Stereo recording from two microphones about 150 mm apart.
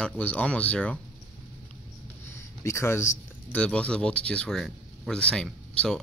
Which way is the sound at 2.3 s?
20° left (ahead or behind).